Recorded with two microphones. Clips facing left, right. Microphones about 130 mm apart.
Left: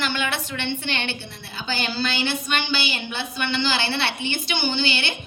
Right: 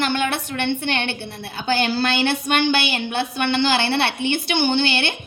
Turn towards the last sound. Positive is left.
turn(degrees=-60)  # may be behind; listen again after turning